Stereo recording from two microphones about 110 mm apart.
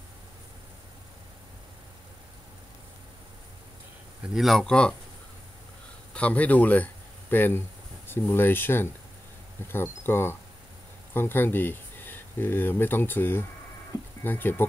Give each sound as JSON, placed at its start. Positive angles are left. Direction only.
{"t": 4.3, "sound": "speech", "side_deg": 0}
{"t": 6.1, "sound": "speech", "side_deg": 10}